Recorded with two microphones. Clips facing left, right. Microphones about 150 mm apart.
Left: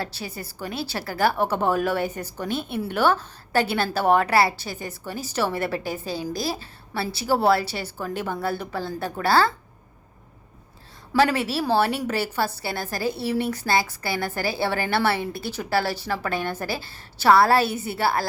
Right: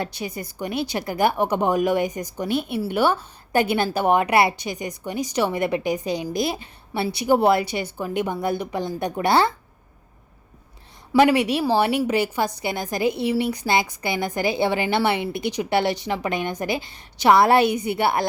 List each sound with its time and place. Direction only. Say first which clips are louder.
0.6 s a woman's voice: right 4 dB; 15° right (ahead or behind)
11.1 s a woman's voice: right 4 dB; 15° right (ahead or behind)